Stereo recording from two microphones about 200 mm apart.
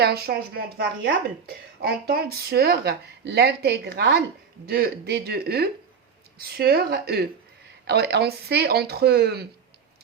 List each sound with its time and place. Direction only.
0.0 s a woman's voice: 50° right (ahead or behind)